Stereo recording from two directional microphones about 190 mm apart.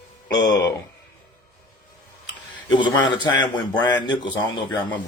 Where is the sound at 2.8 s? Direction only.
25° left (ahead or behind).